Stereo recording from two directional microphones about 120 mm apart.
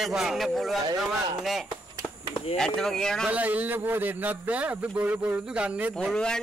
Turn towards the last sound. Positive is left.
turn(degrees=5)  # may be behind; listen again after turning